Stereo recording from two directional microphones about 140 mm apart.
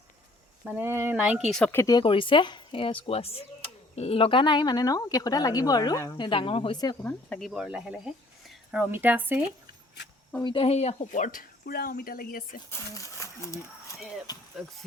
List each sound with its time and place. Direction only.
0.6 s speech: 10° right (ahead or behind)
1.6 s speech: 15° left (ahead or behind)
2.0 s a woman's voice: 35° left (ahead or behind)
7.0 s speech: 10° left (ahead or behind); by 9.4 s 15° right (ahead or behind)
10.4 s speech: 40° left (ahead or behind); by 12.6 s 80° left
12.7 s a woman's voice: 20° left (ahead or behind)